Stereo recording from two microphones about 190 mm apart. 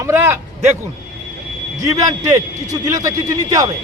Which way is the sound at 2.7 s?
15° right (ahead or behind).